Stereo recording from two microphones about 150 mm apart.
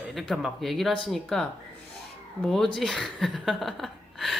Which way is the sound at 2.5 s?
5° left (ahead or behind).